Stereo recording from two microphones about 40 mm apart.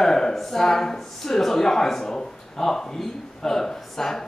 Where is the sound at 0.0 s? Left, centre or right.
Centre.